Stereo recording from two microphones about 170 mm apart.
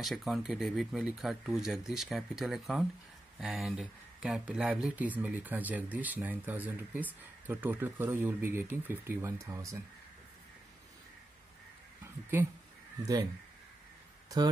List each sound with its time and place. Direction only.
0.0 s speech: centre (ahead or behind); by 9.8 s 20° right (ahead or behind)
13.0 s speech: 20° right (ahead or behind)